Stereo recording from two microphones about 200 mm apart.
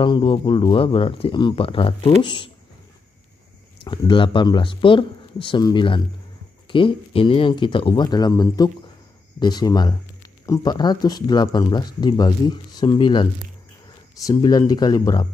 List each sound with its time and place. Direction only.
0.0 s speech: 25° left (ahead or behind)
3.8 s speech: 25° left (ahead or behind)